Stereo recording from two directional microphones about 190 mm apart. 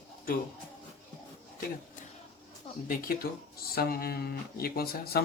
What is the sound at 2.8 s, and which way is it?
Speech, 50° left (ahead or behind).